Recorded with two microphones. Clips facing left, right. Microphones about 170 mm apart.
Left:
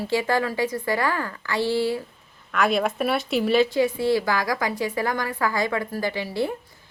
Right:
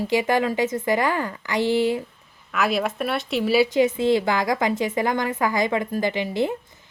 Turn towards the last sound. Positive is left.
turn(degrees=-20)  # may be behind; listen again after turning